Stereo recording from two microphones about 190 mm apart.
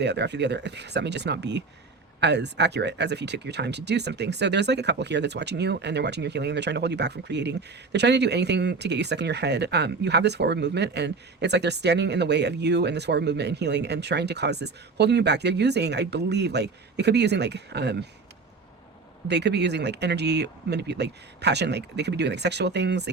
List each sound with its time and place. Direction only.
0.0 s speech: 65° right (ahead or behind)
19.3 s speech: 65° right (ahead or behind)